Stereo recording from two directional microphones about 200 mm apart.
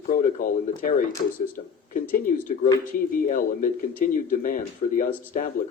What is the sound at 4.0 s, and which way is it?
Speech, 45° left (ahead or behind).